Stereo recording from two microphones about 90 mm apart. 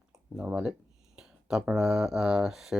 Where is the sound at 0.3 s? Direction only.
10° right (ahead or behind).